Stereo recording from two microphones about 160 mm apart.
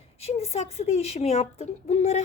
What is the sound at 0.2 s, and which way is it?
A woman's voice, 40° left (ahead or behind).